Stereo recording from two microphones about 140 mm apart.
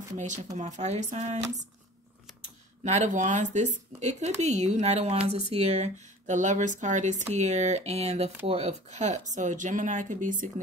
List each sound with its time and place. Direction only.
0.2 s speech: 60° right (ahead or behind)
2.8 s speech: 60° right (ahead or behind)